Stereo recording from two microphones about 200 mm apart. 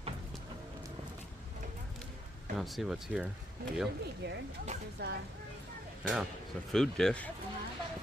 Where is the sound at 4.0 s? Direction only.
55° right (ahead or behind).